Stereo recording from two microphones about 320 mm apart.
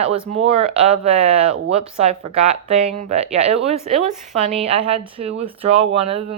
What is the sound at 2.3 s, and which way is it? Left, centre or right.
Speech, right.